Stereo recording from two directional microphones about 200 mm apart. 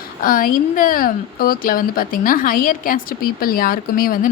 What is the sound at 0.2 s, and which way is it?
Speech, 45° left (ahead or behind).